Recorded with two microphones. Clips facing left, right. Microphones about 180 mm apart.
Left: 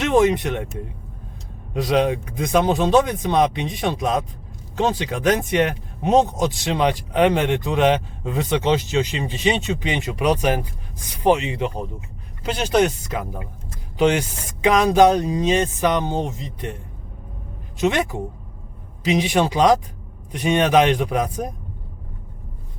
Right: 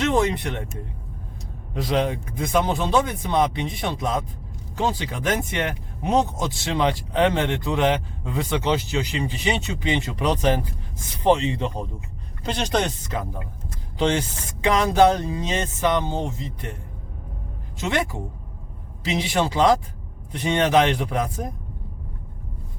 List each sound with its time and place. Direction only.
0.0 s speech: 15° left (ahead or behind)
2.0 s speech: 15° left (ahead or behind)
17.7 s speech: 15° left (ahead or behind)